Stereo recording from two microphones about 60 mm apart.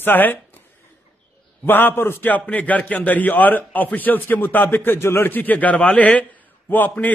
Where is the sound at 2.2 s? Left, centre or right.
Left.